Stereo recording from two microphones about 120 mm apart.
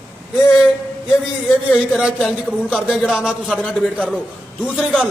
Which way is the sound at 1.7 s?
5° right (ahead or behind).